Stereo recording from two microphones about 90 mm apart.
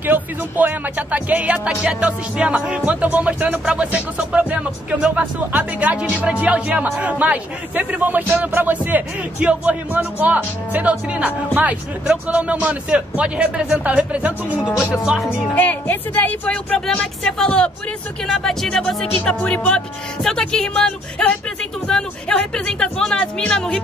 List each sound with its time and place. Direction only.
0.0 s speech: 20° right (ahead or behind)
15.2 s speech: 20° left (ahead or behind)